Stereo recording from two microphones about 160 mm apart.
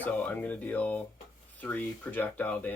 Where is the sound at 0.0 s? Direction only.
10° left (ahead or behind).